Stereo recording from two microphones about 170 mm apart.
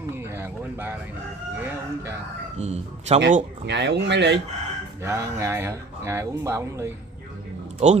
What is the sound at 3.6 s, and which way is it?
Speech, 90° right.